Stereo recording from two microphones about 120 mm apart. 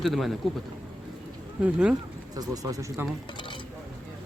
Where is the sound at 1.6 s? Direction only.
10° right (ahead or behind).